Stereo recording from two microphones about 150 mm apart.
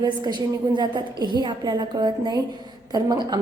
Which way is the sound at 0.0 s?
30° right (ahead or behind).